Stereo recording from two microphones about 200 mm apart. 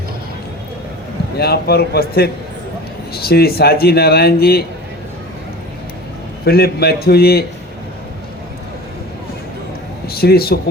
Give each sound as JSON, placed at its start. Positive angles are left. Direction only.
{"t": 1.4, "sound": "speech", "side_deg": 50}
{"t": 6.4, "sound": "speech", "side_deg": 50}
{"t": 10.1, "sound": "speech", "side_deg": 50}